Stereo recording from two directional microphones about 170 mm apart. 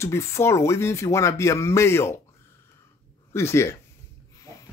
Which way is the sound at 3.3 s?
15° left (ahead or behind).